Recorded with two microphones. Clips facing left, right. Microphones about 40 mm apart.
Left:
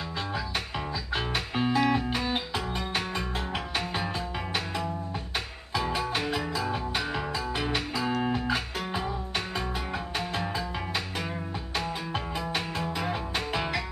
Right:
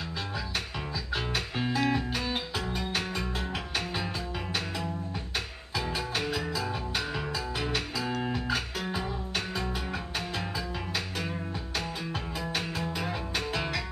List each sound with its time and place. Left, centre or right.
1.1 s music: centre
5.8 s music: centre
12.1 s music: centre